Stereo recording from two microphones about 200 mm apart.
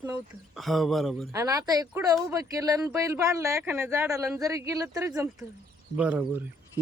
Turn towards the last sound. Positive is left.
turn(degrees=-10)  # may be behind; listen again after turning